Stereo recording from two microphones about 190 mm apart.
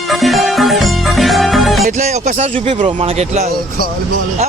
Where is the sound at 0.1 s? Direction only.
Centre (ahead or behind).